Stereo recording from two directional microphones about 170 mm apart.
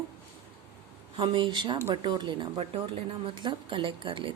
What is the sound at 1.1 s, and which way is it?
A woman's voice, 30° right (ahead or behind).